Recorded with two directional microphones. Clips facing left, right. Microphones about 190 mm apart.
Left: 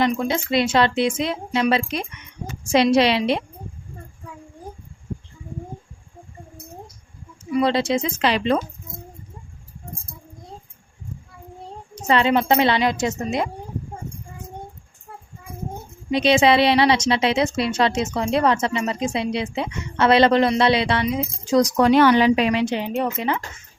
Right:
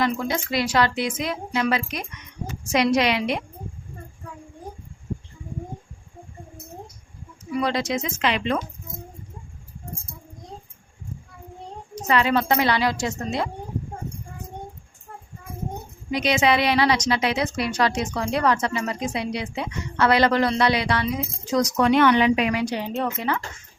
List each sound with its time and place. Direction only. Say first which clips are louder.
0.0 s a woman's voice: left 3 dB; 25° left (ahead or behind)
7.5 s a woman's voice: left 5 dB; 25° left (ahead or behind)
12.0 s a woman's voice: left 3 dB; 25° left (ahead or behind)
16.0 s a woman's voice: left 4 dB; 25° left (ahead or behind)